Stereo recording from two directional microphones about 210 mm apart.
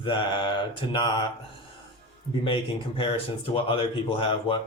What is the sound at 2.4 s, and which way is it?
Speech, 25° left (ahead or behind).